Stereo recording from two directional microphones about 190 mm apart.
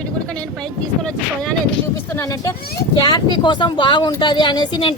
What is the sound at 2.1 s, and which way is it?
A woman's voice, 15° left (ahead or behind).